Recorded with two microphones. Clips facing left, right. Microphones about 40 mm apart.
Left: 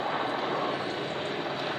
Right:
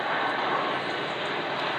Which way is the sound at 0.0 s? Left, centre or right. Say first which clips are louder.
Right 3 dB; right.